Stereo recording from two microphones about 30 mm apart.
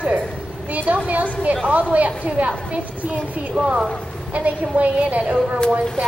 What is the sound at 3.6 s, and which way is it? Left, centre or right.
A woman's voice, right.